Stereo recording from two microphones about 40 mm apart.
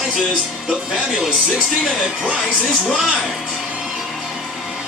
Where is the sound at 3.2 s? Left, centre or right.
Centre.